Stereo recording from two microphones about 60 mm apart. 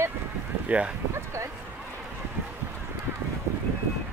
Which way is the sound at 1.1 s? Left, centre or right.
Right.